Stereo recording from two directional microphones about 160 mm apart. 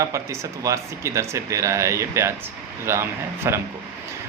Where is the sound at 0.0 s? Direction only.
20° right (ahead or behind).